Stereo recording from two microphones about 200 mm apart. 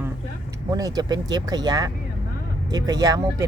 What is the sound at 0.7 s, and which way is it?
Speech, 20° right (ahead or behind).